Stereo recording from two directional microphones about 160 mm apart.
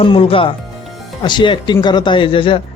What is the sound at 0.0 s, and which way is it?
A man's voice, 35° left (ahead or behind).